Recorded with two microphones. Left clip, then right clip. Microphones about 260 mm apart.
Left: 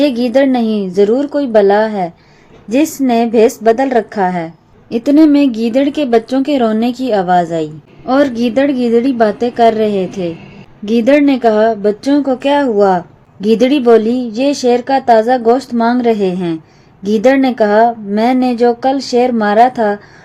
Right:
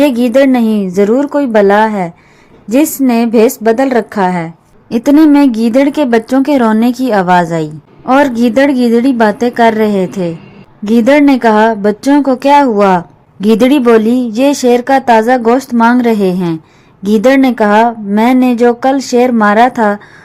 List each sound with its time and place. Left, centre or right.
0.0 s a woman's voice: right